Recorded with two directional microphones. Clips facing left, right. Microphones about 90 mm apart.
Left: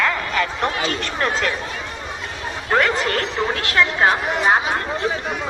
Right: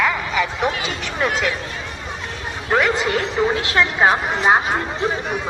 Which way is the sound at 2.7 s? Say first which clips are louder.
Right 1 dB; 10° right (ahead or behind).